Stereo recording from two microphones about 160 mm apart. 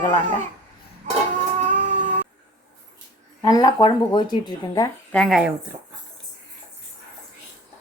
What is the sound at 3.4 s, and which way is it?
Speech, 25° left (ahead or behind).